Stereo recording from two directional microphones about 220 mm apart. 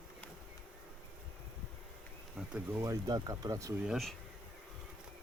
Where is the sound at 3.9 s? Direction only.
Centre (ahead or behind).